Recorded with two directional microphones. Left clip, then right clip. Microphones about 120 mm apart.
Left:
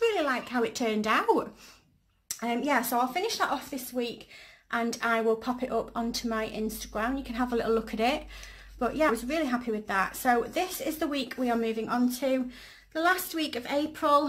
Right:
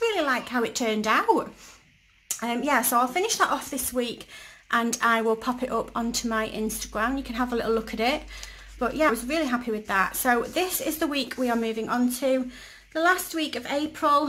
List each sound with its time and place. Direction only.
0.0 s speech: 5° right (ahead or behind)
2.4 s speech: 15° right (ahead or behind); by 4.1 s 40° right (ahead or behind)
4.6 s speech: 20° right (ahead or behind); by 14.2 s centre (ahead or behind)